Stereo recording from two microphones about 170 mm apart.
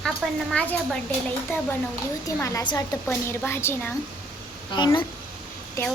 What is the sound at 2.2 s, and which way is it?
A woman's voice, 20° left (ahead or behind).